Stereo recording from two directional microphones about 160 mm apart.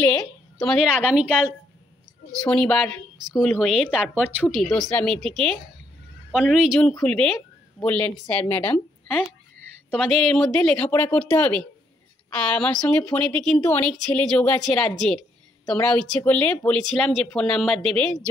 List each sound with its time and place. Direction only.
0.0 s speech: 5° left (ahead or behind)
2.4 s a woman's voice: 5° left (ahead or behind)